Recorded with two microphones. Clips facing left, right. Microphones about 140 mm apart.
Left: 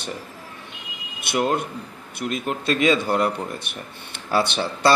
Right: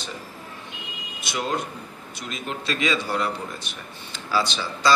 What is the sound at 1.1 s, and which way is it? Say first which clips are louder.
Speech: left 5 dB; 55° left (ahead or behind).